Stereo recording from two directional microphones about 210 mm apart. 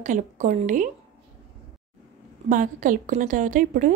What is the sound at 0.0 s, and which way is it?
Speech, 35° right (ahead or behind).